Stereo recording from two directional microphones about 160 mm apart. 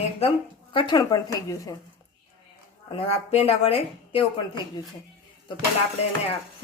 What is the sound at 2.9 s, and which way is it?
Speech, 35° left (ahead or behind).